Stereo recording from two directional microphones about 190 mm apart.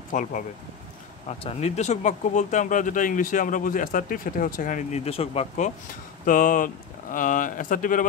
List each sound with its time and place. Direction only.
0.1 s speech: 45° left (ahead or behind)
6.2 s speech: 45° left (ahead or behind)